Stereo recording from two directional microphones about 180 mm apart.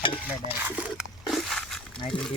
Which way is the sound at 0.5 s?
10° right (ahead or behind).